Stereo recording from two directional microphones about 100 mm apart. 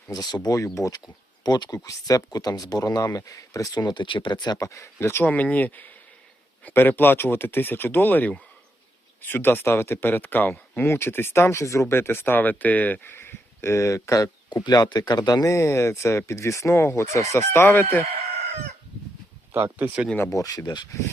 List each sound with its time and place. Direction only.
0.1 s speech: 45° left (ahead or behind)
4.5 s speech: 30° left (ahead or behind)
15.5 s speech: 25° left (ahead or behind)
19.5 s speech: 20° right (ahead or behind)
20.1 s speech: 30° left (ahead or behind)